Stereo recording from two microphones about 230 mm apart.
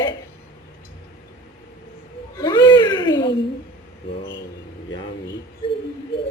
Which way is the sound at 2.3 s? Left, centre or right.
Centre.